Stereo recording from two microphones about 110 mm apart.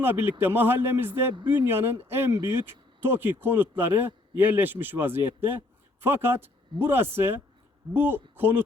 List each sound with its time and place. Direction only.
0.0 s speech: 20° right (ahead or behind)